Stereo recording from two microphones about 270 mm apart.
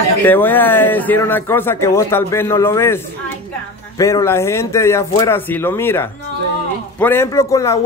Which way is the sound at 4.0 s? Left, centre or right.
Centre.